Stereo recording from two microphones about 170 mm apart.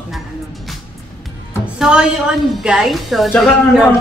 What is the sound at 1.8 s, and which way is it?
Speech, 5° right (ahead or behind).